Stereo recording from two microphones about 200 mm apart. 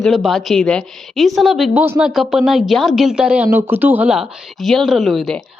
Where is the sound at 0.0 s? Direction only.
Centre (ahead or behind).